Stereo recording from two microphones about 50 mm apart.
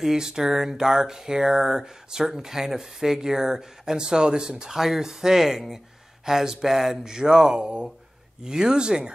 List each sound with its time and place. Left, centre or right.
0.0 s speech: centre